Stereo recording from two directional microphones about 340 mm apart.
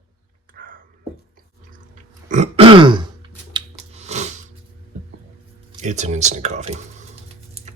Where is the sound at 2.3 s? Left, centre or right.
Centre.